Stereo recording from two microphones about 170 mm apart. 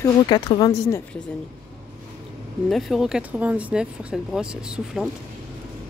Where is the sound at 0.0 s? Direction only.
25° left (ahead or behind).